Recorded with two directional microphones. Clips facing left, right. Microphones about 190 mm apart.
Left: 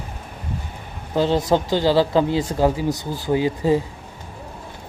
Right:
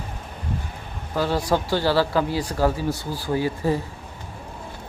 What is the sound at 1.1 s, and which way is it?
Speech, 20° left (ahead or behind).